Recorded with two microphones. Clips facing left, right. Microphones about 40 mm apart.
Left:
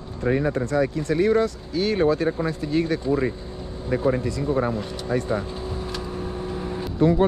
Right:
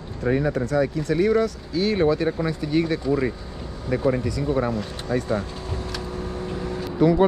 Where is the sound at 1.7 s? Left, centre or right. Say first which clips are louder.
Even; right.